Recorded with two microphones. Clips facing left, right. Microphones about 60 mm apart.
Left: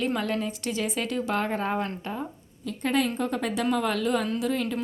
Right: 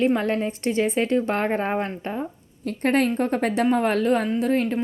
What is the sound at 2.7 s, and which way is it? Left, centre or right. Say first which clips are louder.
A woman's voice: right 5 dB; right.